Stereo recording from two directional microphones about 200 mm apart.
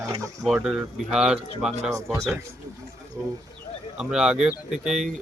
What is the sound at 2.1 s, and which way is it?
Speech, 15° right (ahead or behind).